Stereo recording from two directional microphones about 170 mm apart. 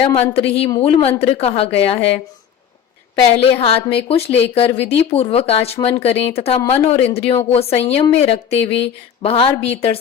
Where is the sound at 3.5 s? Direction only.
35° left (ahead or behind).